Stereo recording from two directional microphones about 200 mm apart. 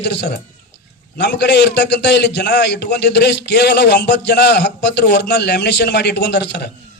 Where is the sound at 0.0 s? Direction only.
60° left (ahead or behind).